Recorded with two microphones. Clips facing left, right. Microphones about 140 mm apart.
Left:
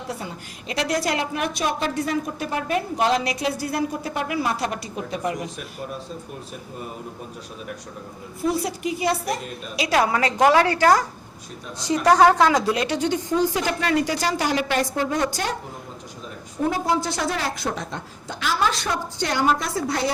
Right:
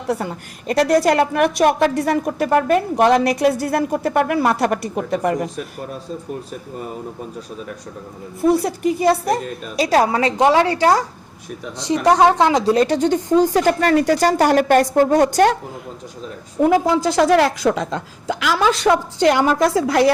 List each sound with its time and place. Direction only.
0.1 s a woman's voice: 55° right (ahead or behind)
8.4 s speech: 55° right (ahead or behind)
9.8 s a woman's voice: 35° right (ahead or behind)
12.7 s speech: 45° right (ahead or behind); by 15.5 s 60° right (ahead or behind)
16.6 s a woman's voice: 90° right